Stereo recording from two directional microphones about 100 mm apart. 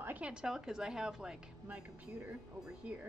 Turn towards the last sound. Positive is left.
turn(degrees=-15)  # may be behind; listen again after turning